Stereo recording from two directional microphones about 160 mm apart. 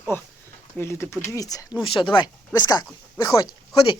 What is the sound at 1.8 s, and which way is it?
Speech, 30° left (ahead or behind).